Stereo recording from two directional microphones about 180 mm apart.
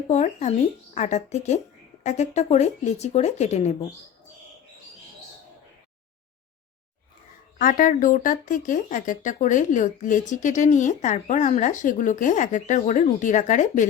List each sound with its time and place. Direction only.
0.1 s speech: 40° left (ahead or behind)
7.6 s speech: 50° left (ahead or behind)